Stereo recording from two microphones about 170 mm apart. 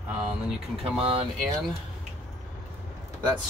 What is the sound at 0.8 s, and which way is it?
Speech, 35° right (ahead or behind).